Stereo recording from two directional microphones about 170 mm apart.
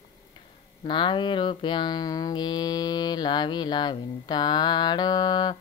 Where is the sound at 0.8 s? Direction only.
25° left (ahead or behind).